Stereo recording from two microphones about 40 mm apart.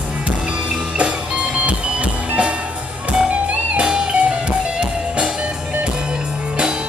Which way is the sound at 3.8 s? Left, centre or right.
Right.